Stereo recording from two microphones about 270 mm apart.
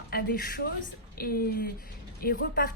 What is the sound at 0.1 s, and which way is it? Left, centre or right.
A woman's voice, left.